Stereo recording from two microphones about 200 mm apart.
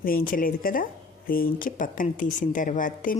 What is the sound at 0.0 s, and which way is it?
A woman's voice, 45° left (ahead or behind).